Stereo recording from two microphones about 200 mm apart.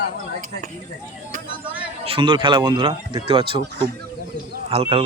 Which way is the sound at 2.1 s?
25° right (ahead or behind).